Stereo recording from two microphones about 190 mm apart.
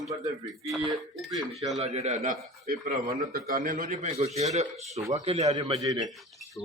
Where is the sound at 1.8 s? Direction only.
35° right (ahead or behind).